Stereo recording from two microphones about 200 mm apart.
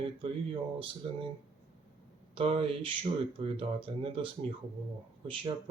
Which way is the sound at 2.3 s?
25° right (ahead or behind).